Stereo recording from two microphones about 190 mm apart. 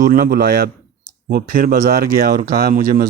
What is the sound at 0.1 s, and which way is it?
Speech, 50° right (ahead or behind).